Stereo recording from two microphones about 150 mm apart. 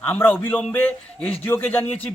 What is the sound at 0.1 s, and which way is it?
Speech, 15° left (ahead or behind).